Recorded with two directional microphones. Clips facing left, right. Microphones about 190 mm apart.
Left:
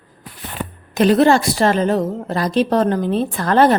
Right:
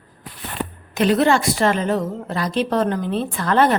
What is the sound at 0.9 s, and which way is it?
A woman's voice, 40° left (ahead or behind).